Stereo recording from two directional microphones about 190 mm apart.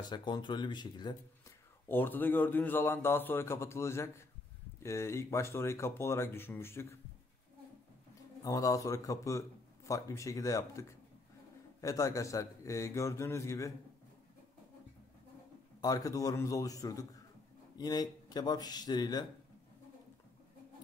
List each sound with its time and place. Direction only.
0.1 s speech: 25° left (ahead or behind)
1.9 s a man's voice: 10° left (ahead or behind)
8.5 s a man's voice: 20° left (ahead or behind)
15.8 s a man's voice: 20° left (ahead or behind)